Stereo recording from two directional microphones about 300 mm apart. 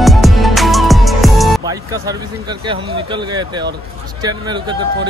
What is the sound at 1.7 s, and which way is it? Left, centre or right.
Speech, centre.